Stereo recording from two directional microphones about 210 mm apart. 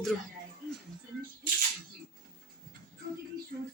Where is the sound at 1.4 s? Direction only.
40° right (ahead or behind).